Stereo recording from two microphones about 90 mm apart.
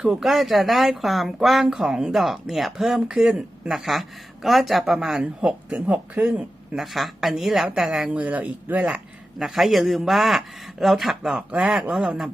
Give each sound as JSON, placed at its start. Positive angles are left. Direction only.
{"t": 0.0, "sound": "speech", "side_deg": -5}
{"t": 9.4, "sound": "speech", "side_deg": 0}